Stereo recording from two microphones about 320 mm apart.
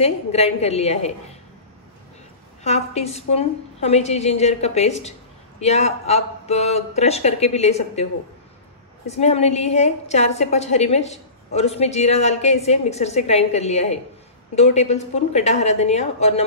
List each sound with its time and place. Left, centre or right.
0.0 s a woman's voice: centre
2.6 s a woman's voice: left